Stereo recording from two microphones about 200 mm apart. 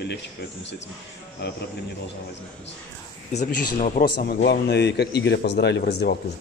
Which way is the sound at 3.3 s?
35° left (ahead or behind).